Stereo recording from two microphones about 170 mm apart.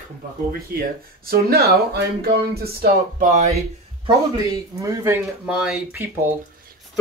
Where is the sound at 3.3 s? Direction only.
45° right (ahead or behind).